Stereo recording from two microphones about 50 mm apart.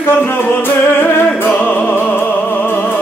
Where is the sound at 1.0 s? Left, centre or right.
Left.